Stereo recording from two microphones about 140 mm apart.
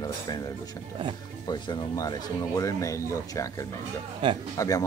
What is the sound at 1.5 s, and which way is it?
Speech, 30° left (ahead or behind).